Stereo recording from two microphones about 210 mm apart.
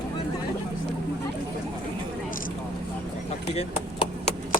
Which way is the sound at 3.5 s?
30° left (ahead or behind).